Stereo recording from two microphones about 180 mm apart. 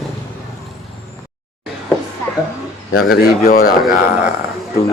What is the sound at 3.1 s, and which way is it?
Speech, 55° left (ahead or behind).